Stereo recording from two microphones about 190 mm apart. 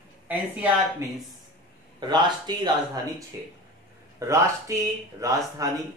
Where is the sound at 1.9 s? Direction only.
25° right (ahead or behind).